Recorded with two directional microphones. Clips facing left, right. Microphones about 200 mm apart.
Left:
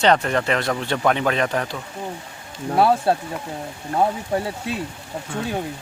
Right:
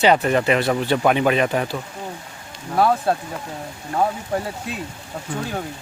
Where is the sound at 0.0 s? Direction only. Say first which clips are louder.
Right 2 dB; 5° right (ahead or behind).